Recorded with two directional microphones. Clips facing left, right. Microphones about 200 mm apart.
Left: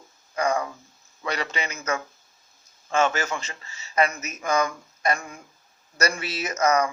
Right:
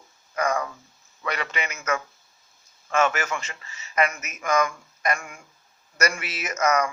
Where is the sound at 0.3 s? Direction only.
25° left (ahead or behind).